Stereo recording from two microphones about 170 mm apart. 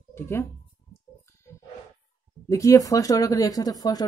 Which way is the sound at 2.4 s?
20° left (ahead or behind).